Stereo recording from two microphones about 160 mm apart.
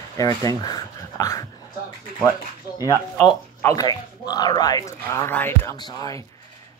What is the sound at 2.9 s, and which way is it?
Speech, 20° left (ahead or behind).